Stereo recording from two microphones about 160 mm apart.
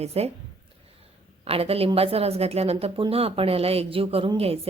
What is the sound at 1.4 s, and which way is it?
A woman's voice, 40° right (ahead or behind).